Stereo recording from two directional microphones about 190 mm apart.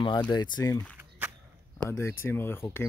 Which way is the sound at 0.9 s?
10° right (ahead or behind).